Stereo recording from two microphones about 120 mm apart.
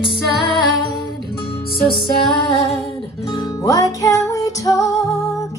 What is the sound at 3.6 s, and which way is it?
Music, 30° left (ahead or behind).